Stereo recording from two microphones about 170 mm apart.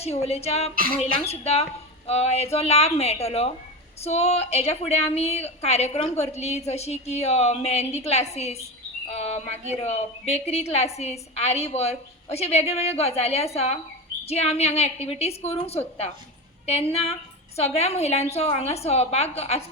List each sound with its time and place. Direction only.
0.0 s a woman's voice: 40° left (ahead or behind)